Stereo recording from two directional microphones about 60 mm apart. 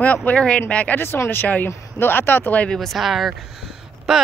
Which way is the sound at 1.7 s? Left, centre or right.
Left.